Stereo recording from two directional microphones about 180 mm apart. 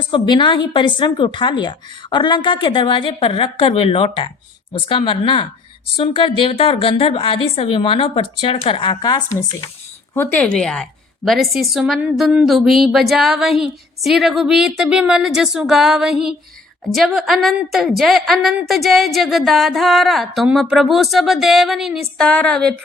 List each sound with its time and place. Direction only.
0.1 s a woman's voice: 25° left (ahead or behind)
10.2 s a woman's voice: 10° left (ahead or behind)